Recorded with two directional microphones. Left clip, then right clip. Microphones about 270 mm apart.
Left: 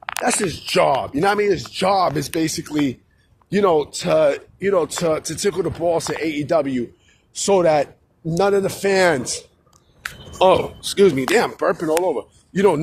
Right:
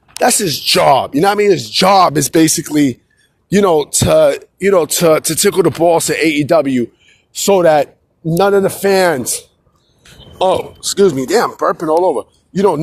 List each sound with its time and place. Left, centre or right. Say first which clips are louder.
0.2 s speech: right 9 dB; right; by 12.8 s centre